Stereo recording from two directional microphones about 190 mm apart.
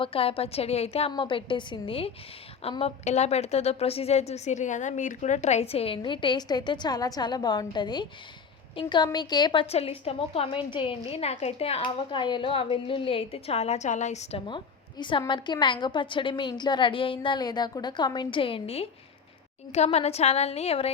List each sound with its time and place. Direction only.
0.0 s a woman's voice: 30° left (ahead or behind)